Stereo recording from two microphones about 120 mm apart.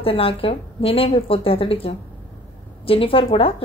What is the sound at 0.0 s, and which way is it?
A woman's voice, 50° left (ahead or behind).